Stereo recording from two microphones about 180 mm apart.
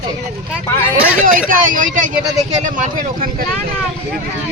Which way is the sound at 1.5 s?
50° right (ahead or behind).